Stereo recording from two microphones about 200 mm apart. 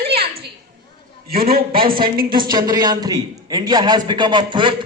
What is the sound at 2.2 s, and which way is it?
A man's voice, 20° right (ahead or behind).